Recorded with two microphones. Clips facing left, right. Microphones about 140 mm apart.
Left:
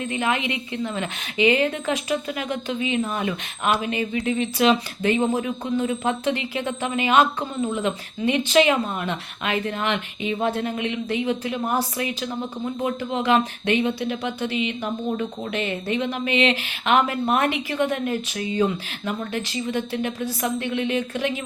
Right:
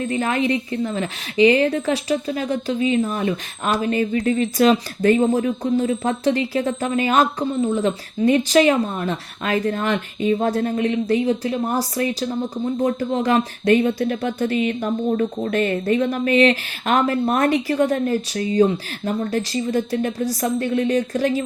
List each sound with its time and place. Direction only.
0.0 s speech: 40° right (ahead or behind)